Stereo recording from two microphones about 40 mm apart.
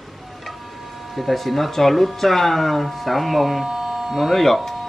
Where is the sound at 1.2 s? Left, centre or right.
Centre.